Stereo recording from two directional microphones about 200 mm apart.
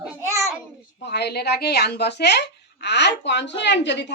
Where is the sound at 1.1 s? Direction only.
55° left (ahead or behind).